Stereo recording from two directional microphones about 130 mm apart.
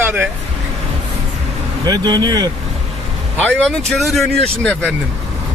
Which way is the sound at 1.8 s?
30° right (ahead or behind).